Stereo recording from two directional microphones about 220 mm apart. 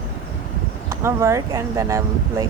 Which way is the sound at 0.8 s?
15° right (ahead or behind).